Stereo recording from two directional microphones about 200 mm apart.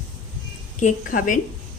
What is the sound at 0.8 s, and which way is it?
Speech, 40° left (ahead or behind).